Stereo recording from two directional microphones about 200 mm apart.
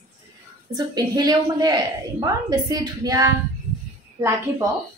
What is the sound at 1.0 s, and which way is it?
A woman's voice, 20° right (ahead or behind).